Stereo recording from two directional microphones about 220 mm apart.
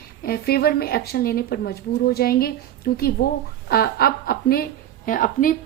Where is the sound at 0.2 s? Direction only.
45° left (ahead or behind).